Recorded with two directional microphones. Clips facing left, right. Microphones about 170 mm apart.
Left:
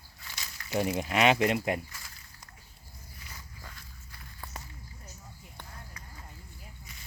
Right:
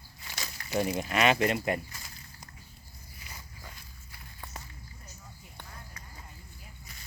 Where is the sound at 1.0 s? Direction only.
20° left (ahead or behind).